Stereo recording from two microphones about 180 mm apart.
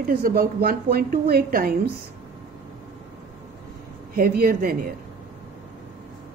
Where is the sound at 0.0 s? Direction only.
55° right (ahead or behind).